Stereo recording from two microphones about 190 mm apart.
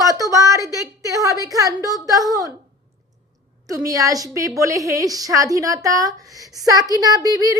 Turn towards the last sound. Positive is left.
turn(degrees=-20)  # may be behind; listen again after turning